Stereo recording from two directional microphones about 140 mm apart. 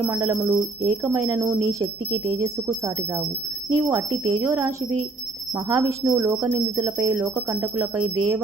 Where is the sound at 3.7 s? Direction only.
25° right (ahead or behind).